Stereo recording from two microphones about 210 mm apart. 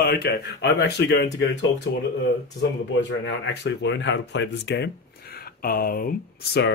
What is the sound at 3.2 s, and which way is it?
Speech, 55° left (ahead or behind).